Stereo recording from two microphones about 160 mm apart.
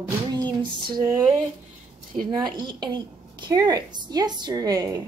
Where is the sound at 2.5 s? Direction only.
25° right (ahead or behind).